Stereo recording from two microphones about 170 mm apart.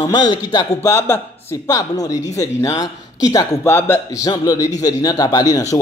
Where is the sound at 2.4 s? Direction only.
20° left (ahead or behind).